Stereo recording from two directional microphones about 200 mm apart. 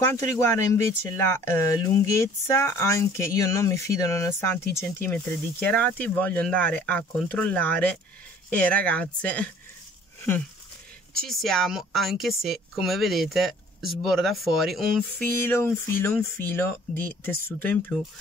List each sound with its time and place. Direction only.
0.0 s speech: 15° left (ahead or behind)
11.2 s speech: centre (ahead or behind)